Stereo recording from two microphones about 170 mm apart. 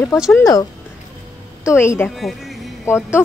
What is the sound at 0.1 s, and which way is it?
Speech, 20° left (ahead or behind).